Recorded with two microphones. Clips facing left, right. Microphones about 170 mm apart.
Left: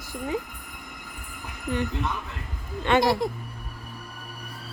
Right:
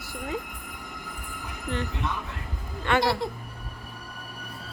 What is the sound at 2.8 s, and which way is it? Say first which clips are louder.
Speech: left 3 dB; 20° left (ahead or behind).